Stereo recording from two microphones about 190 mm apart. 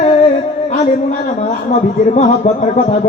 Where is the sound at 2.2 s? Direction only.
35° left (ahead or behind).